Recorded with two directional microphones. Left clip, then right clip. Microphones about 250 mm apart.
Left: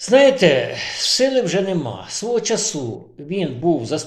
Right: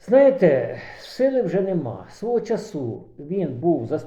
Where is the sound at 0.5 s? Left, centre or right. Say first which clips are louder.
Left 3 dB; centre.